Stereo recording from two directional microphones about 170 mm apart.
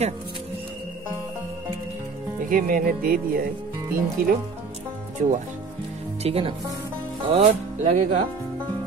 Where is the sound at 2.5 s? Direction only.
60° right (ahead or behind).